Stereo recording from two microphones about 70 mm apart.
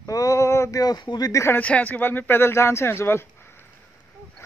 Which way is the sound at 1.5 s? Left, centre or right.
Left.